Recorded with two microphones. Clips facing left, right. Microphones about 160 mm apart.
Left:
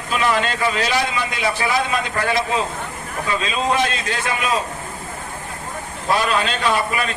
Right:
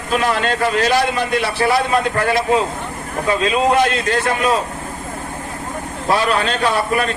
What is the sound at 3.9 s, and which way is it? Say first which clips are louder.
Speech: right 6 dB; 50° right (ahead or behind).